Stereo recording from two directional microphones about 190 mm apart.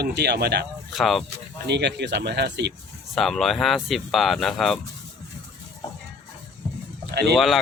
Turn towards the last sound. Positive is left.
turn(degrees=0)  # may be behind; listen again after turning